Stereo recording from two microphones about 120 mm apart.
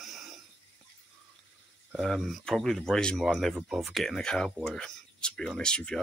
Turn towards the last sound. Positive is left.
turn(degrees=5)  # may be behind; listen again after turning